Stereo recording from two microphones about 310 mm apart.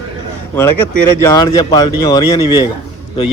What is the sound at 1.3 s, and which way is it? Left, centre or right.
Speech, centre.